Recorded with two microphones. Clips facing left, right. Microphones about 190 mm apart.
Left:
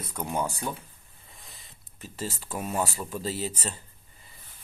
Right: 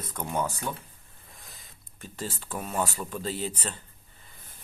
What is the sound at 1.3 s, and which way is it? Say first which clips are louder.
Speech: even; centre (ahead or behind).